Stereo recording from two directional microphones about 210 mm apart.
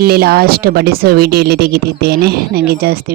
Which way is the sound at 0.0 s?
45° right (ahead or behind).